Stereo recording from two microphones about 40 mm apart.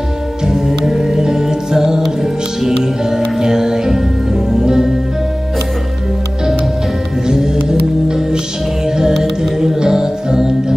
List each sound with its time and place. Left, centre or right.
0.5 s music: centre
7.2 s music: centre